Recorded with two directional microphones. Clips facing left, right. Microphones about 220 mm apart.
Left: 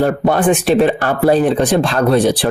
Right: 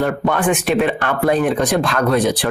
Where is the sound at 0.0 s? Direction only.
35° left (ahead or behind).